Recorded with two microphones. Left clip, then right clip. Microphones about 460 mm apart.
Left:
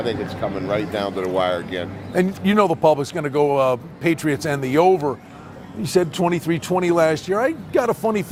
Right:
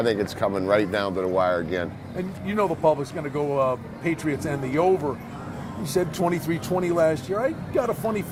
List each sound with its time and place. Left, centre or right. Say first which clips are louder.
0.0 s speech: right 1 dB; right
1.2 s speech: left 2 dB; right
2.1 s a man's voice: left 9 dB; left